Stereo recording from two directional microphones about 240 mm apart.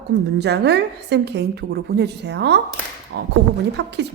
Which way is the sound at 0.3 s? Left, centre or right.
Right.